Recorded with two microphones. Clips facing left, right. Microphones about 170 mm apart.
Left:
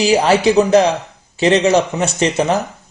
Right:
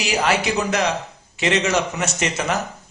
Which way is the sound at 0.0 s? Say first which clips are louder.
Left 8 dB; 30° left (ahead or behind).